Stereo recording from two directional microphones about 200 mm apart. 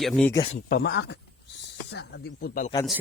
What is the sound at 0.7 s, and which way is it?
Speech, 55° left (ahead or behind).